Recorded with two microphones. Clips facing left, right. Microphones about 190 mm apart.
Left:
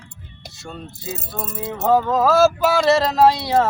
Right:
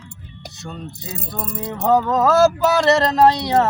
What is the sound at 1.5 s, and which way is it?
Music, 5° left (ahead or behind).